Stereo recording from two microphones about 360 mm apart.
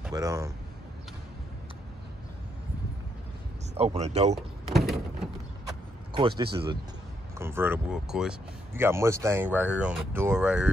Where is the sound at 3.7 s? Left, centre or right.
Centre.